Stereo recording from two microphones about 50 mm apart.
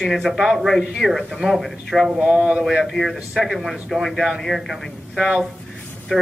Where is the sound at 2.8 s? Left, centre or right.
Centre.